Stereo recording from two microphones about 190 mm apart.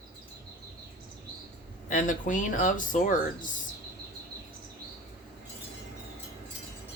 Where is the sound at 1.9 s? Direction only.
45° left (ahead or behind).